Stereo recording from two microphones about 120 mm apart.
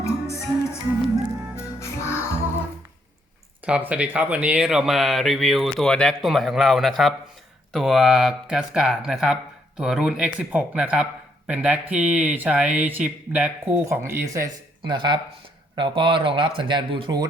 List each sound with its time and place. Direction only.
0.0 s music: 25° left (ahead or behind)
3.7 s speech: 10° right (ahead or behind)
13.7 s speech: 20° right (ahead or behind)
14.8 s speech: 40° right (ahead or behind)